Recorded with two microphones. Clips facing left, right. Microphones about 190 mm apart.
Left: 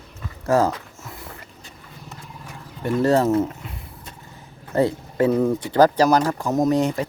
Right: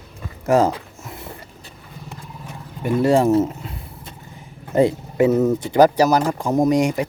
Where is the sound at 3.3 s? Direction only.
30° right (ahead or behind).